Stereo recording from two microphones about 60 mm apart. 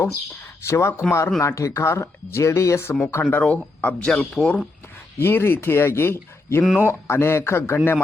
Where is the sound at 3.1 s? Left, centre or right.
Left.